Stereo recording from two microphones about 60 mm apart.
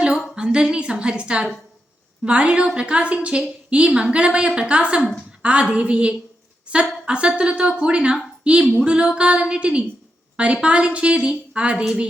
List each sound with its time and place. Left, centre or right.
0.0 s a woman's voice: centre